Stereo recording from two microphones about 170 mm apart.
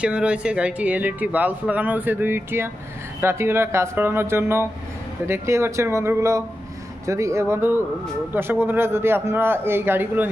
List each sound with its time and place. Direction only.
0.0 s speech: 5° right (ahead or behind)